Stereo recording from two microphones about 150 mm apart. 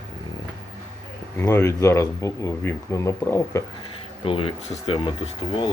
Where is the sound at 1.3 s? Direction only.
20° left (ahead or behind).